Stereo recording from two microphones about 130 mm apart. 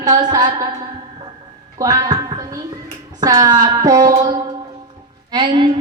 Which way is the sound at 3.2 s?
30° right (ahead or behind).